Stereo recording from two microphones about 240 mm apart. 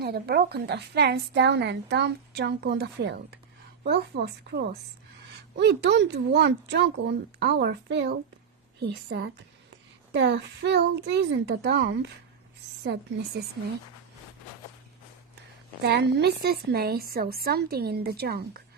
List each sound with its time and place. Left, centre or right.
0.0 s a woman's voice: right
15.8 s a woman's voice: right